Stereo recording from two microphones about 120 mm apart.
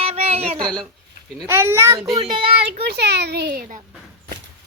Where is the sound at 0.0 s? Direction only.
60° right (ahead or behind).